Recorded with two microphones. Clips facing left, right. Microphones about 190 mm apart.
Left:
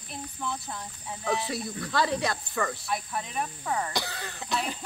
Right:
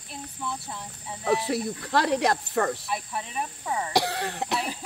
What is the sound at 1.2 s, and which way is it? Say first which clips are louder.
Speech: right 4 dB; 35° right (ahead or behind).